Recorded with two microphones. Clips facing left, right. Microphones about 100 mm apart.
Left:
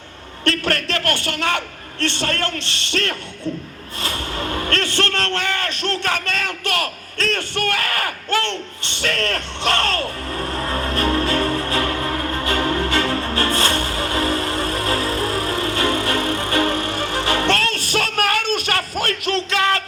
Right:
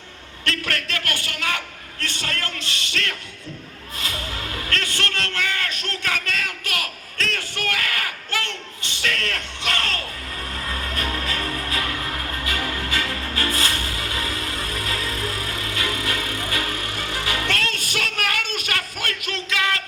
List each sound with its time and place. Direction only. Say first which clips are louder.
0.4 s a man's voice: left 6 dB; 40° left (ahead or behind)
9.6 s music: left 8 dB; 35° left (ahead or behind)